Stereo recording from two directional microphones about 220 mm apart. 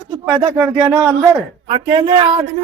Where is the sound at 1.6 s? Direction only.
20° right (ahead or behind).